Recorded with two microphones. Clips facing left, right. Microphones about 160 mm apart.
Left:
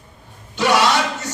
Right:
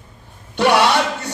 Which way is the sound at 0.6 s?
60° right (ahead or behind).